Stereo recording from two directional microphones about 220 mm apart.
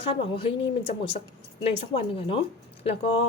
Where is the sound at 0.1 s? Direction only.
25° left (ahead or behind).